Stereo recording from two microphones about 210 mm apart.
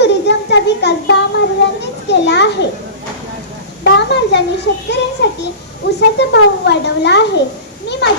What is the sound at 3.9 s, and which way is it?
A child's voice, 55° left (ahead or behind).